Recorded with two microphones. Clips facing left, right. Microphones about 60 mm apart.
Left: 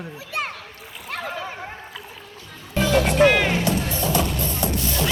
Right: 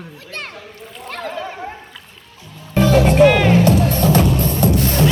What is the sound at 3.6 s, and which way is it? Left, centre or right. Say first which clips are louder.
Music: right 8 dB; right.